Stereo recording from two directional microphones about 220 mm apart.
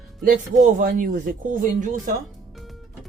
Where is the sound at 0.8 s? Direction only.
35° right (ahead or behind).